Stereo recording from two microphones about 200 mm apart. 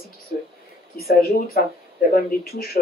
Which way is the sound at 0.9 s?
50° left (ahead or behind).